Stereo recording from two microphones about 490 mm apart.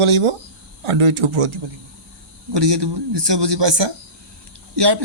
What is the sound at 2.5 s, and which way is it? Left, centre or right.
Speech, right.